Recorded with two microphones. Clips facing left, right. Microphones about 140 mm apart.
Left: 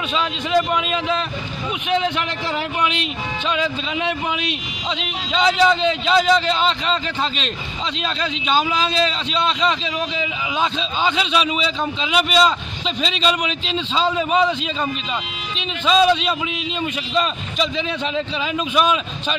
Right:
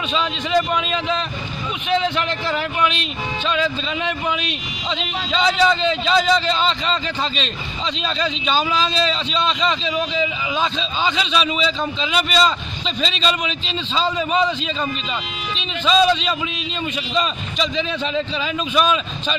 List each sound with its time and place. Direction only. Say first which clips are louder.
0.1 s a man's voice: even; 5° left (ahead or behind)
15.5 s a man's voice: even; 10° left (ahead or behind)